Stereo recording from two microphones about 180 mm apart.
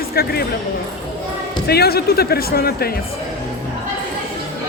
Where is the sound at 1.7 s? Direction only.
60° left (ahead or behind).